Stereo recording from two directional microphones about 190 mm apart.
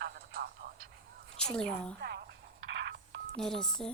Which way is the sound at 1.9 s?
55° right (ahead or behind).